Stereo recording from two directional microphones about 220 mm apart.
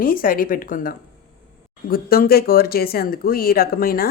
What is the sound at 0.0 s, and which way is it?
Speech, 40° left (ahead or behind).